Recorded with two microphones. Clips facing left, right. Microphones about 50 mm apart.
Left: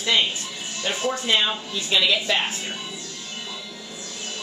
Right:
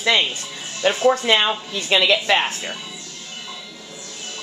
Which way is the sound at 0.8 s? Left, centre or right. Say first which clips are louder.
Right 8 dB; right.